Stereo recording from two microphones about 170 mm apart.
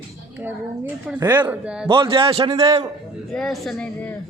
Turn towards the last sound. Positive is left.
turn(degrees=5)  # may be behind; listen again after turning